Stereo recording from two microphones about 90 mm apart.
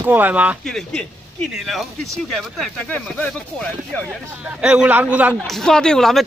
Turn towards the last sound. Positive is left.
turn(degrees=5)  # may be behind; listen again after turning